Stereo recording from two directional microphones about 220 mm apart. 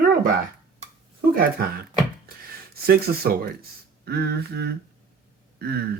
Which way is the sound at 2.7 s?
45° right (ahead or behind).